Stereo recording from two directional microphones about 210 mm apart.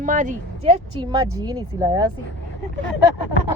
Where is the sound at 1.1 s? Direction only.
15° right (ahead or behind).